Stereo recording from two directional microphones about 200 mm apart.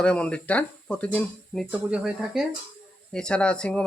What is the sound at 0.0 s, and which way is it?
Speech, 5° left (ahead or behind).